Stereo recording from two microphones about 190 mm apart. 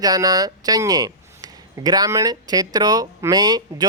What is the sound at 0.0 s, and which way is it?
Speech, 20° right (ahead or behind).